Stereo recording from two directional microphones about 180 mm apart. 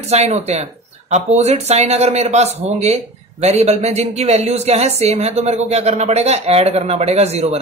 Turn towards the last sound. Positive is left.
turn(degrees=-35)  # may be behind; listen again after turning